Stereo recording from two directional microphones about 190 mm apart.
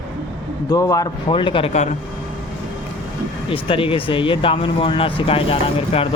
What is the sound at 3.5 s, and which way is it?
Speech, 30° left (ahead or behind).